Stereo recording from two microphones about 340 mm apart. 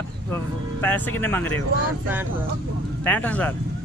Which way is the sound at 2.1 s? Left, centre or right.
Centre.